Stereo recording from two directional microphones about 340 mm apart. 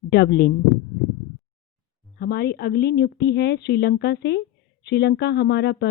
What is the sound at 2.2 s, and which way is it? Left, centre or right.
Speech, left.